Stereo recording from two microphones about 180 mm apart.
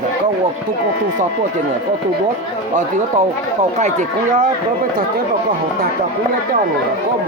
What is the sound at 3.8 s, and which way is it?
Speech, 45° right (ahead or behind).